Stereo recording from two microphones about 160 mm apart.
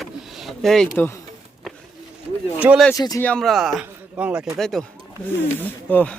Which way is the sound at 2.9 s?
25° left (ahead or behind).